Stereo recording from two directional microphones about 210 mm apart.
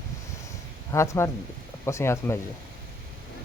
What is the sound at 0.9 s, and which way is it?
Speech, 15° left (ahead or behind).